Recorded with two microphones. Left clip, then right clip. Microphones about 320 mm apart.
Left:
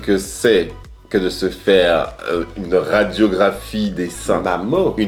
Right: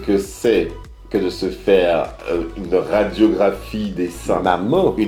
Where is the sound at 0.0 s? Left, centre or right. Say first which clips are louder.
Left 1 dB; left.